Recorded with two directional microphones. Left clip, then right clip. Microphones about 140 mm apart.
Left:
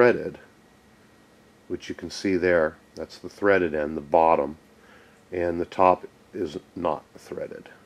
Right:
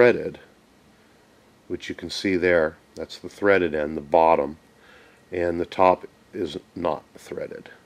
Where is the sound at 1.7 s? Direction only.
25° right (ahead or behind).